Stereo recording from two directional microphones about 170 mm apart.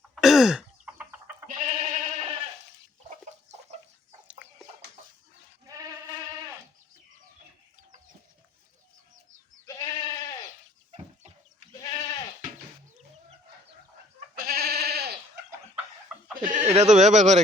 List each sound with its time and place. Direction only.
0.2 s throat clearing: centre (ahead or behind)
1.5 s sheep: 45° right (ahead or behind)
3.2 s chicken: 45° right (ahead or behind)
5.6 s sheep: 20° right (ahead or behind)
9.6 s goat: 20° left (ahead or behind)
11.8 s goat: 20° left (ahead or behind)
14.3 s sheep: 60° right (ahead or behind)
16.4 s speech: 45° right (ahead or behind)